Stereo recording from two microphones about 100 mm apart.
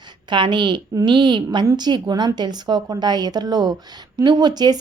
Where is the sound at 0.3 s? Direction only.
50° right (ahead or behind).